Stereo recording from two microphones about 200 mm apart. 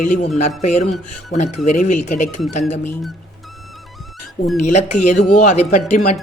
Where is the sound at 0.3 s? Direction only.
35° left (ahead or behind).